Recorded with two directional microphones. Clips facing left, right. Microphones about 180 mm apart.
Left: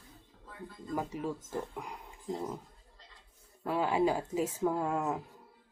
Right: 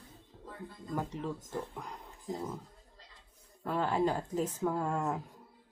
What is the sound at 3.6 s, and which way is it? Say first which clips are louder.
Speech: left 2 dB; 10° left (ahead or behind).